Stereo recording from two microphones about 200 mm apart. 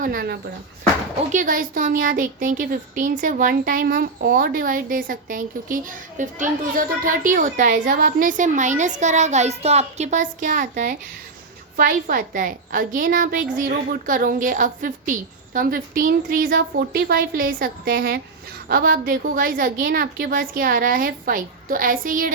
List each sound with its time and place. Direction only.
0.0 s a woman's voice: 50° right (ahead or behind)